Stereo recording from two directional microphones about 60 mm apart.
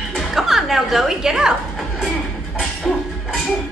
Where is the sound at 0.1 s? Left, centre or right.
Centre.